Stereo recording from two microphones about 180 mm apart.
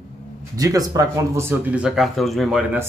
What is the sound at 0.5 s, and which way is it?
Speech, 20° right (ahead or behind).